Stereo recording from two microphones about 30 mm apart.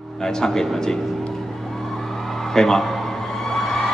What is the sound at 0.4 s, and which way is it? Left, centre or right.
Speech, left.